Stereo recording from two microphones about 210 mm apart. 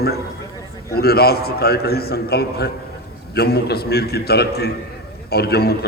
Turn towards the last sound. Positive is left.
turn(degrees=50)  # may be behind; listen again after turning